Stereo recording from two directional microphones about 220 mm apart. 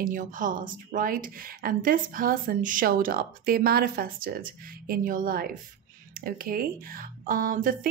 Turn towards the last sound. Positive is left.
turn(degrees=-40)  # may be behind; listen again after turning